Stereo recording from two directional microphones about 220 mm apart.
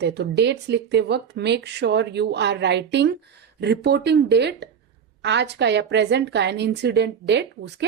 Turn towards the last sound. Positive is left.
turn(degrees=-50)  # may be behind; listen again after turning